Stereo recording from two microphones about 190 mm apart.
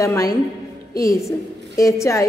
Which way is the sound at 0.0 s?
15° left (ahead or behind).